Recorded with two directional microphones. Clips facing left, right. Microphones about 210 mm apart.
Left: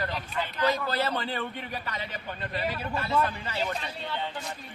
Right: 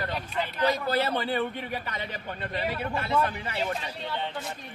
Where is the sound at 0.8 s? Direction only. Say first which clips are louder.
Right 3 dB; 15° right (ahead or behind).